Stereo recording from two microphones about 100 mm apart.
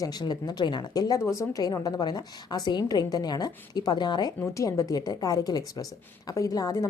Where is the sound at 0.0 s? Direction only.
40° left (ahead or behind).